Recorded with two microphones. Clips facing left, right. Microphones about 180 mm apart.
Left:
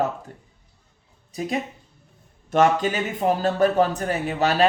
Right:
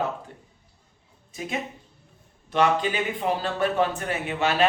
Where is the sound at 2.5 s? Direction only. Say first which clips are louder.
Left 3 dB; 45° left (ahead or behind).